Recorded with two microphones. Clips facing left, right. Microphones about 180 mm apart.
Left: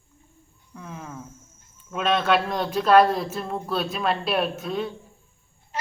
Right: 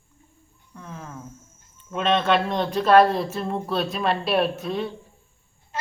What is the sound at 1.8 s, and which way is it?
Speech, 5° left (ahead or behind).